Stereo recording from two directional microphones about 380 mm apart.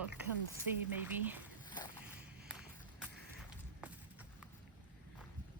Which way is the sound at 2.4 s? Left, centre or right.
Centre.